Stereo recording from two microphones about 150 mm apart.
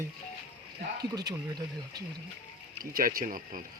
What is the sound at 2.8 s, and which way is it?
Speech, 70° right (ahead or behind).